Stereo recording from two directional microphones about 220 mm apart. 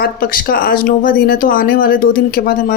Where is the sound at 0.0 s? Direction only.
40° left (ahead or behind).